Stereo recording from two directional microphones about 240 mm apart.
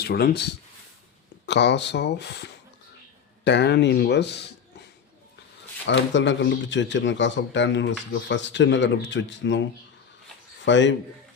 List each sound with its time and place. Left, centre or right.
0.0 s speech: left
5.8 s speech: left
10.7 s speech: left